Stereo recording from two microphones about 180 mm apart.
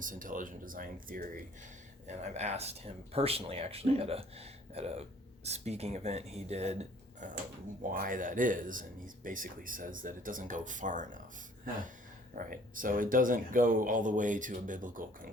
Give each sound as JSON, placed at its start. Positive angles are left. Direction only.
{"t": 0.0, "sound": "speech", "side_deg": -50}
{"t": 2.0, "sound": "speech", "side_deg": -40}
{"t": 12.3, "sound": "speech", "side_deg": -50}